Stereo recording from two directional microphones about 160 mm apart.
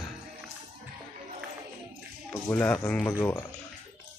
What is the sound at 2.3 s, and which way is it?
Speech, 10° left (ahead or behind).